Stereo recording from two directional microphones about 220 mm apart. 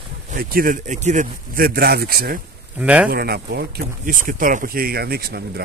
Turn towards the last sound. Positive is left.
turn(degrees=-45)  # may be behind; listen again after turning